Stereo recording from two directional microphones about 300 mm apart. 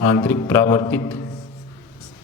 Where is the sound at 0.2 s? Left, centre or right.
Centre.